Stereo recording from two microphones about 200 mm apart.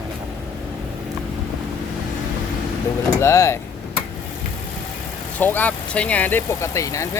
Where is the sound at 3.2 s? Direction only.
15° left (ahead or behind).